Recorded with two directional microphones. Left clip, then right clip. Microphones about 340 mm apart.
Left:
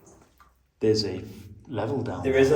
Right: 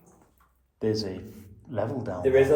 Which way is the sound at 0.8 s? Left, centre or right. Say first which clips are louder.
Left 5 dB; centre.